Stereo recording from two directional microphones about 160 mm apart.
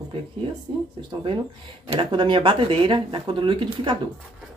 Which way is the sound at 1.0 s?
30° right (ahead or behind).